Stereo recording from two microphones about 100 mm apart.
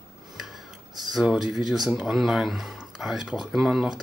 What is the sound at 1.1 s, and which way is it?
Speech, 5° right (ahead or behind).